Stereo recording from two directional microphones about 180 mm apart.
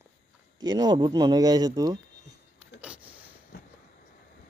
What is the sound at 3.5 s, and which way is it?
Vehicle, 65° left (ahead or behind).